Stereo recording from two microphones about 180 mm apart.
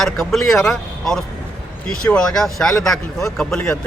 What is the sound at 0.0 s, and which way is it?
Speech, centre (ahead or behind).